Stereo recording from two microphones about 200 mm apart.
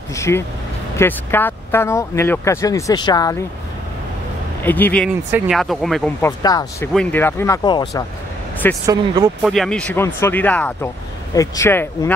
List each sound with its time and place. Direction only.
0.1 s speech: 15° left (ahead or behind)
4.6 s speech: 10° left (ahead or behind)
6.2 s speech: 15° left (ahead or behind)
8.8 s speech: 20° right (ahead or behind)
9.4 s speech: centre (ahead or behind)